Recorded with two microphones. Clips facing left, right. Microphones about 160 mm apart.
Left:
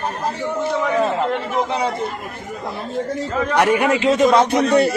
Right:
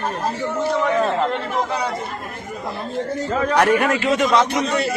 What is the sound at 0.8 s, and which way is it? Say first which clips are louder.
Chatter: left 1 dB; 5° left (ahead or behind).